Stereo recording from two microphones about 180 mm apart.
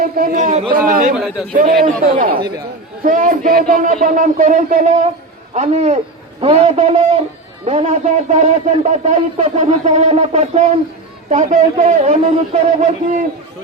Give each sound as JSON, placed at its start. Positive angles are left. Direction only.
{"t": 0.0, "sound": "speech", "side_deg": -50}
{"t": 1.1, "sound": "a man's voice", "side_deg": -5}
{"t": 1.5, "sound": "speech", "side_deg": -50}